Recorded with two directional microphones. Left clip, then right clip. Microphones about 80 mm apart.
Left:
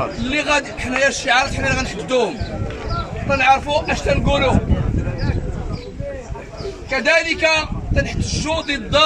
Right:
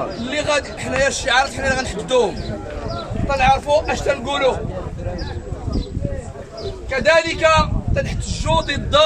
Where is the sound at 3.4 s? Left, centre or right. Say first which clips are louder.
Even; right.